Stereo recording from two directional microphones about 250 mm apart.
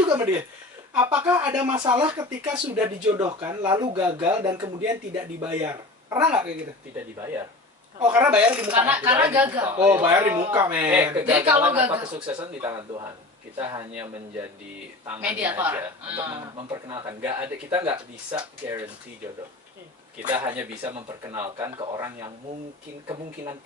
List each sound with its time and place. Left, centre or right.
0.1 s speech: centre
20.4 s speech: centre